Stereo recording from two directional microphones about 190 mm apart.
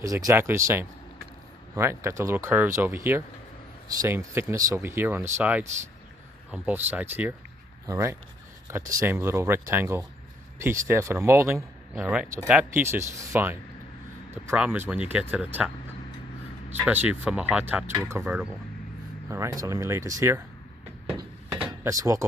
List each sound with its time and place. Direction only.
0.0 s speech: 15° right (ahead or behind)
16.7 s speech: 10° right (ahead or behind)
21.6 s drawer open or close: 20° right (ahead or behind)